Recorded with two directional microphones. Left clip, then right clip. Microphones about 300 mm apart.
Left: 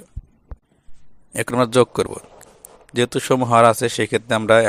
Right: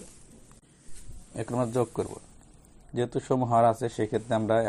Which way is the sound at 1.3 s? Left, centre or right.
Left.